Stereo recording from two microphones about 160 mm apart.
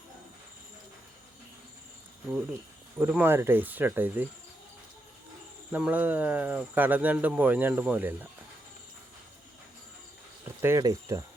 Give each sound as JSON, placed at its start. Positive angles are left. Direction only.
{"t": 3.0, "sound": "speech", "side_deg": -10}
{"t": 5.7, "sound": "speech", "side_deg": -10}
{"t": 10.4, "sound": "speech", "side_deg": -15}